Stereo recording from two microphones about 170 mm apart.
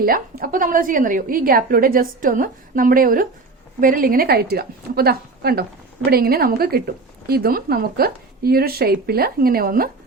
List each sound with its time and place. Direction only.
0.0 s speech: 60° right (ahead or behind)